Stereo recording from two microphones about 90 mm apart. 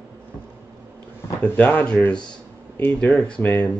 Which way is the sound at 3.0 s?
10° left (ahead or behind).